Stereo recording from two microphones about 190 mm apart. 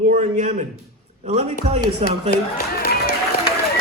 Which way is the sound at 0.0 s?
45° right (ahead or behind).